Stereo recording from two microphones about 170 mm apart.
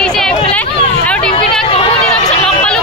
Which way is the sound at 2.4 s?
5° left (ahead or behind).